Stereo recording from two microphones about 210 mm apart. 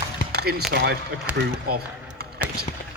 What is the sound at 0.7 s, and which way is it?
Speech, 55° right (ahead or behind).